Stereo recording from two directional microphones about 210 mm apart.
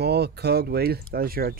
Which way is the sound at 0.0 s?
50° right (ahead or behind).